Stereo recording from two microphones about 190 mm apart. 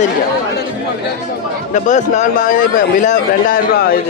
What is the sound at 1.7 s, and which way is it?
A man's voice, 40° left (ahead or behind).